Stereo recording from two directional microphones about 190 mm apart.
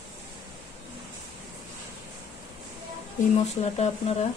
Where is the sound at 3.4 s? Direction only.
35° left (ahead or behind).